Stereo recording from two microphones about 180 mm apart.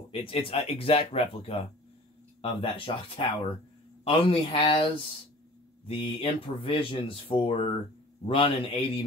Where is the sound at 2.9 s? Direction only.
30° left (ahead or behind).